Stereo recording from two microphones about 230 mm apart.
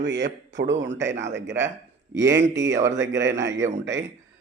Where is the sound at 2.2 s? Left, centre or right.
Centre.